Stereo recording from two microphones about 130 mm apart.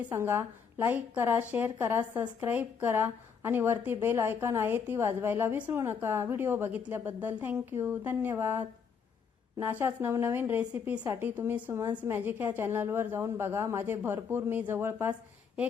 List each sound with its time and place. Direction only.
0.1 s a woman's voice: 20° right (ahead or behind)